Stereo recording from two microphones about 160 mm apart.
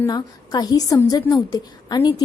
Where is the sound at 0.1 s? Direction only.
25° left (ahead or behind).